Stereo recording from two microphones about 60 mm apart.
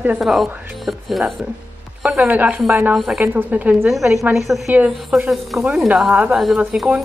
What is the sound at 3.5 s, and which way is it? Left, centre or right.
Speech, right.